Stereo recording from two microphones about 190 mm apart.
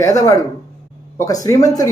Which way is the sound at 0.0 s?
15° left (ahead or behind).